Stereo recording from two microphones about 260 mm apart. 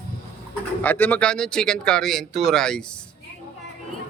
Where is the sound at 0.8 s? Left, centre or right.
Centre.